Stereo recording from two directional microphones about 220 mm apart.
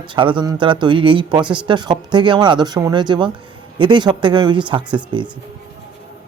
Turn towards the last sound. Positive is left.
turn(degrees=-20)  # may be behind; listen again after turning